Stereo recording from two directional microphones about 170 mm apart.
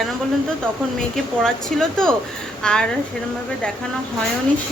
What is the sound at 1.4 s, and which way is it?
Speech, 5° left (ahead or behind).